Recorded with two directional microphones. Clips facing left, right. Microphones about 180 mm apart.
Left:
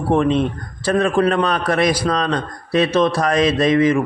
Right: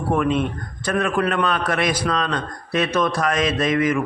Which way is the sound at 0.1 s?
30° left (ahead or behind).